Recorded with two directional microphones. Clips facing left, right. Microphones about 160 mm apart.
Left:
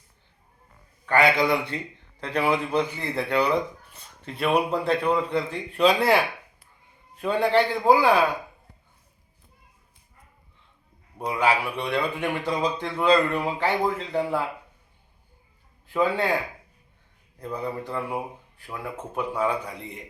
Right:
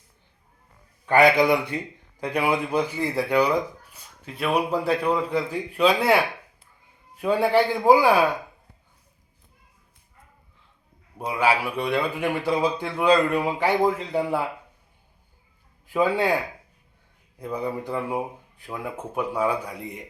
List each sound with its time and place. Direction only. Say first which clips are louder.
1.0 s a man's voice: right 3 dB; 20° right (ahead or behind)
11.2 s speech: right 1 dB; 5° right (ahead or behind)
15.9 s speech: right 2 dB; 10° right (ahead or behind)
17.4 s speech: right 2 dB; 10° right (ahead or behind)